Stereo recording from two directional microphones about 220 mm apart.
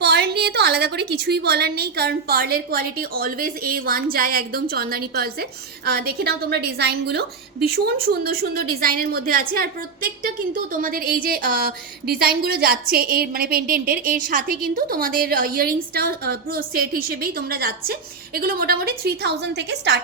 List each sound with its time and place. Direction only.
0.0 s a woman's voice: 50° right (ahead or behind)